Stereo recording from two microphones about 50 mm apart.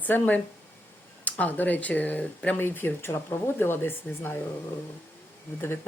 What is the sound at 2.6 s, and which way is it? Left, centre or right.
A woman's voice, left.